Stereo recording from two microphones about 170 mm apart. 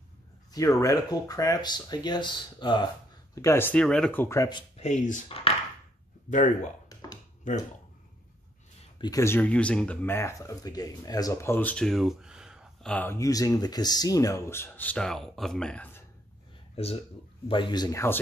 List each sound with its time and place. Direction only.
0.5 s speech: 20° left (ahead or behind)
3.3 s speech: 15° left (ahead or behind)
4.5 s speech: 30° left (ahead or behind)
4.8 s speech: 45° left (ahead or behind)
6.3 s speech: 45° left (ahead or behind)
6.9 s a sound: 20° left (ahead or behind)
8.9 s speech: 25° left (ahead or behind); by 12.9 s 5° right (ahead or behind)
12.9 s speech: 15° left (ahead or behind)
16.7 s speech: 35° left (ahead or behind); by 18.2 s 15° left (ahead or behind)